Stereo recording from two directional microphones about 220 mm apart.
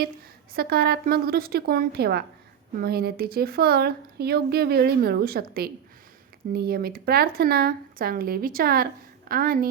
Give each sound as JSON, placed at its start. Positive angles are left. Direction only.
{"t": 0.5, "sound": "a woman's voice", "side_deg": -45}